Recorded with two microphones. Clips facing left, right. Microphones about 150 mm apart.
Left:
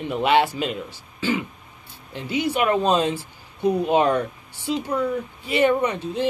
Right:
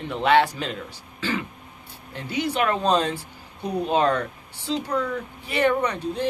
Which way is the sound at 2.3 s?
15° left (ahead or behind).